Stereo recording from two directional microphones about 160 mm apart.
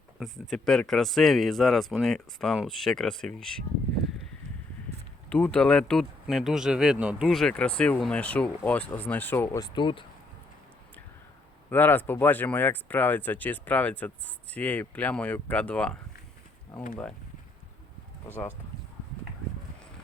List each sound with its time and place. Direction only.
0.2 s speech: centre (ahead or behind)
5.3 s speech: 5° left (ahead or behind)
9.6 s speech: 25° left (ahead or behind)
11.7 s speech: 10° left (ahead or behind)